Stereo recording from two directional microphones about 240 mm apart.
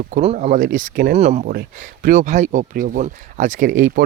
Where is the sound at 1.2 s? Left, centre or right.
Right.